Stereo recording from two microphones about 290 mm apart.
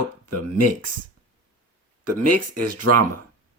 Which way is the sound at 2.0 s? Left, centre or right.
Right.